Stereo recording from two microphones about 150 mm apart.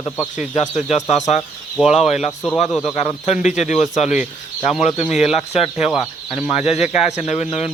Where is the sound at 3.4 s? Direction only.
55° left (ahead or behind).